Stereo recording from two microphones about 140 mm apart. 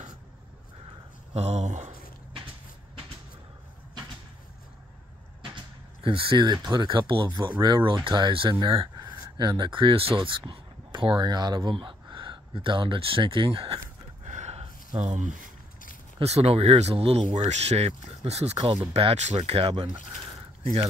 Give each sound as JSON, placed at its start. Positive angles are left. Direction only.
{"t": 1.3, "sound": "speech", "side_deg": -50}
{"t": 6.0, "sound": "speech", "side_deg": -35}
{"t": 14.2, "sound": "gasp", "side_deg": -55}
{"t": 15.0, "sound": "speech", "side_deg": -55}
{"t": 16.2, "sound": "speech", "side_deg": -45}